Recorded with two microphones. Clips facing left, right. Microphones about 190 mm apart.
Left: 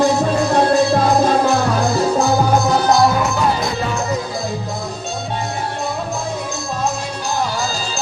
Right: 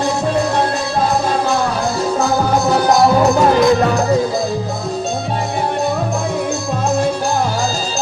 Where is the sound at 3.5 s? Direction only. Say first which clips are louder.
Right 9 dB; 60° right (ahead or behind).